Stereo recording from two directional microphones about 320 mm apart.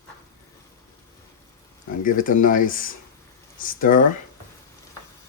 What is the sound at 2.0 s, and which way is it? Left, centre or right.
Speech, left.